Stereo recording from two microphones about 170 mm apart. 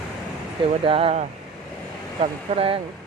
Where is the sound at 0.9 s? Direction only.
35° right (ahead or behind).